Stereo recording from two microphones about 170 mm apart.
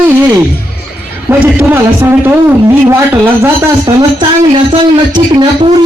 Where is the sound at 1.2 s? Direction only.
10° right (ahead or behind).